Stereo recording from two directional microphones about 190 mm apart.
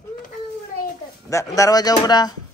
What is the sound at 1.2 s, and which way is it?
Speech, 15° left (ahead or behind).